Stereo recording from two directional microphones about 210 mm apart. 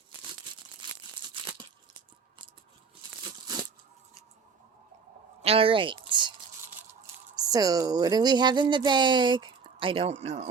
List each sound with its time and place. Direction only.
0.8 s tearing: 20° right (ahead or behind)
5.4 s a sound: 30° right (ahead or behind)
7.3 s speech: 15° right (ahead or behind)